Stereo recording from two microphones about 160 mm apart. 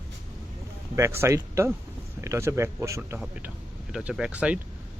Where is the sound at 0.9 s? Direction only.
15° right (ahead or behind).